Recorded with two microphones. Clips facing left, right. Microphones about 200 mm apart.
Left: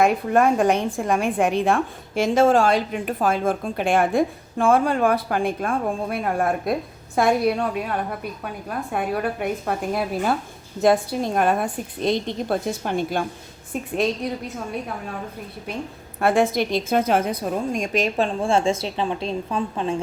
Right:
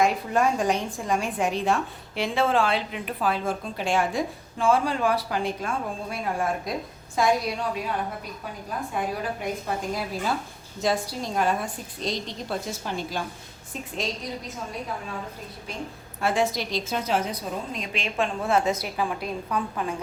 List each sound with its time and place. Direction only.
0.0 s a woman's voice: 55° left (ahead or behind)
16.2 s a woman's voice: 55° left (ahead or behind)
18.3 s speech: 30° left (ahead or behind)